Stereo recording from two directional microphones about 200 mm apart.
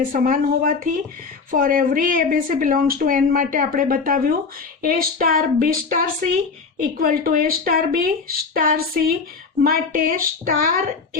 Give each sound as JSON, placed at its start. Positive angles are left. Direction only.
{"t": 0.0, "sound": "speech", "side_deg": -45}